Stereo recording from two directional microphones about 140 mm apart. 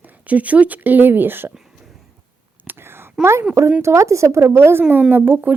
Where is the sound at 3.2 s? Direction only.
20° right (ahead or behind).